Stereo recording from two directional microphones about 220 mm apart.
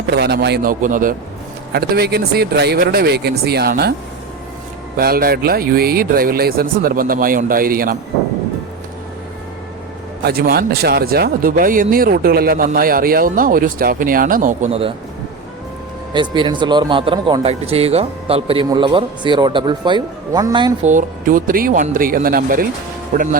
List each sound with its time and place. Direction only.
0.1 s speech: 50° right (ahead or behind)
4.9 s speech: 40° right (ahead or behind)
10.2 s speech: 45° right (ahead or behind); by 14.9 s 25° right (ahead or behind)
16.1 s speech: 20° right (ahead or behind)
20.8 s speech: 35° right (ahead or behind)